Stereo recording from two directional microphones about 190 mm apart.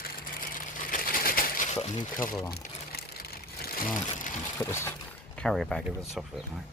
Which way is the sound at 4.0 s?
40° left (ahead or behind).